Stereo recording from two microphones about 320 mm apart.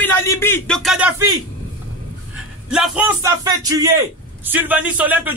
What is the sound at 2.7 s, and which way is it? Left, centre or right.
A man's voice, centre.